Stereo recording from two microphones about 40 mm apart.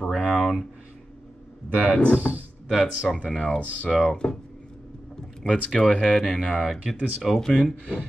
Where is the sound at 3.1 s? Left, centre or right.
Centre.